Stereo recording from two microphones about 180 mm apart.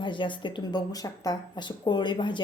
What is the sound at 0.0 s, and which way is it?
Speech, 25° left (ahead or behind).